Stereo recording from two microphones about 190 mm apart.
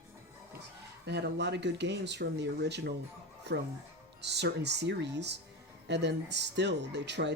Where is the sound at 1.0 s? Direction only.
65° right (ahead or behind).